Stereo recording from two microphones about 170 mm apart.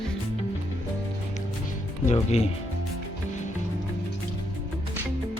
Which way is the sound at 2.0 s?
40° left (ahead or behind).